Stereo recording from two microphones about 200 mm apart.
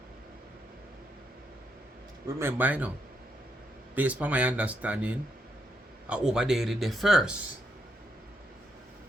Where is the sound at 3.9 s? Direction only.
10° right (ahead or behind).